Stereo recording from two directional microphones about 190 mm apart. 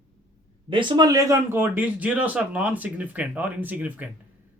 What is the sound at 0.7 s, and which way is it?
Speech, 25° right (ahead or behind).